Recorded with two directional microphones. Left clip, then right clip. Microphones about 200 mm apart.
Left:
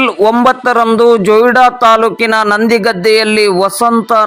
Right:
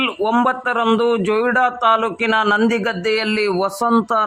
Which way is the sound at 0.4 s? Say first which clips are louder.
Left 9 dB; 25° left (ahead or behind).